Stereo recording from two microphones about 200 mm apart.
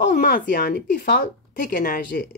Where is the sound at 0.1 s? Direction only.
40° left (ahead or behind).